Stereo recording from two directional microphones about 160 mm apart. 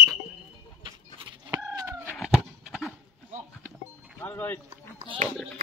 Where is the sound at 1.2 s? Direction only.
30° right (ahead or behind).